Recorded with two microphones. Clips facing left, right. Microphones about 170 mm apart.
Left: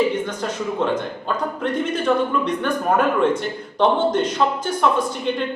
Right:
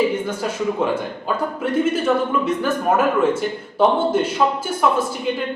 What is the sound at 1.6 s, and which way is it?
A man's voice, 5° right (ahead or behind).